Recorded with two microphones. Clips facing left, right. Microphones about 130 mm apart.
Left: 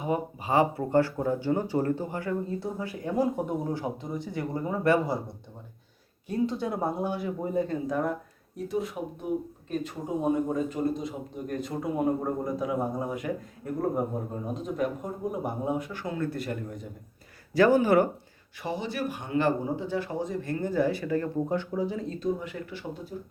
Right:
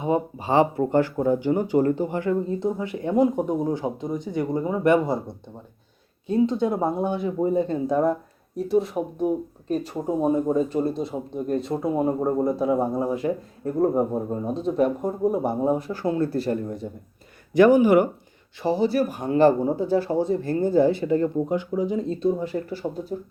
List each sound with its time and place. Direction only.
0.0 s speech: 25° right (ahead or behind)
6.2 s speech: 25° right (ahead or behind)
17.5 s speech: 15° right (ahead or behind)
18.6 s speech: 35° right (ahead or behind)
21.3 s speech: 15° right (ahead or behind)
22.1 s speech: 35° right (ahead or behind)